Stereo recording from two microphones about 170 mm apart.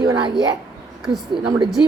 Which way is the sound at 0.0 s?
25° right (ahead or behind).